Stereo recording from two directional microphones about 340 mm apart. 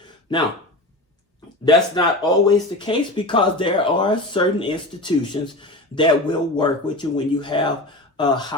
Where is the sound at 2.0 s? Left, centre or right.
Centre.